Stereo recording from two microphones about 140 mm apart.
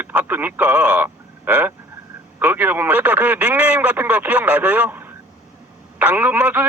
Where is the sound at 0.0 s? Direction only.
15° right (ahead or behind).